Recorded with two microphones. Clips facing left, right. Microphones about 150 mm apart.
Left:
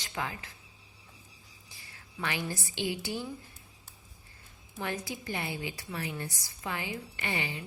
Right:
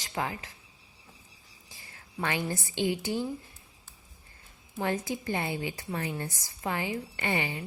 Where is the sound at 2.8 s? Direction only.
20° right (ahead or behind).